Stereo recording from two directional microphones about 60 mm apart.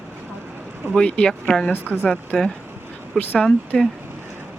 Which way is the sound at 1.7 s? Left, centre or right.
Right.